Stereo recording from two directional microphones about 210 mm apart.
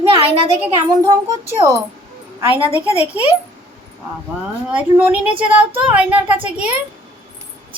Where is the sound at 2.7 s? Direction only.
30° left (ahead or behind).